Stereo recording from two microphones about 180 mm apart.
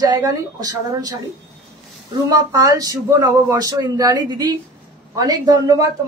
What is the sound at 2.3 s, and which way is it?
Speech, 20° right (ahead or behind).